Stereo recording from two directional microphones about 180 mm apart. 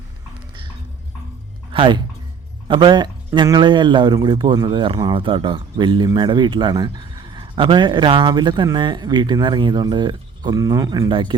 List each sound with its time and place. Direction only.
1.7 s a woman's voice: 30° right (ahead or behind)